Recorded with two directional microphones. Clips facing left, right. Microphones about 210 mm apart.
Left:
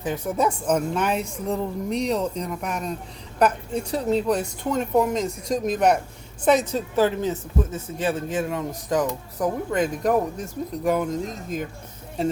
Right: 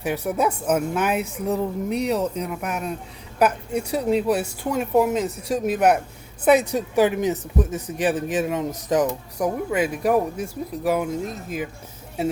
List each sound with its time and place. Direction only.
0.3 s speech: 5° right (ahead or behind)
9.7 s speech: 10° right (ahead or behind)